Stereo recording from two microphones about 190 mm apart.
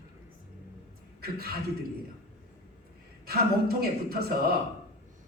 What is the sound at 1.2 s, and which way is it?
Speech, 55° right (ahead or behind).